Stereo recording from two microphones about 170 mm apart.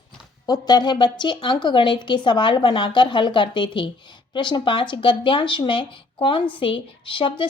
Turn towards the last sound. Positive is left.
turn(degrees=30)  # may be behind; listen again after turning